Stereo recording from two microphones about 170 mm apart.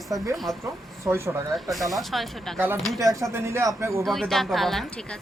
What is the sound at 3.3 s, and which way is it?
Speech, 15° right (ahead or behind).